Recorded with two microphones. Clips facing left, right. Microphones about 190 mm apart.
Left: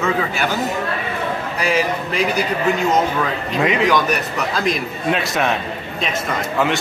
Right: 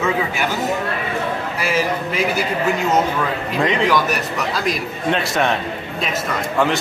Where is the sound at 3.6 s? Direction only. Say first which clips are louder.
Left 1 dB; centre (ahead or behind).